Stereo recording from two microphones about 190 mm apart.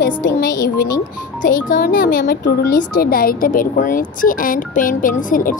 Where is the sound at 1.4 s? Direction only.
45° left (ahead or behind).